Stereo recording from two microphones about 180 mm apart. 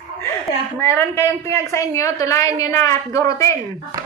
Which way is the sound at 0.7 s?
15° left (ahead or behind).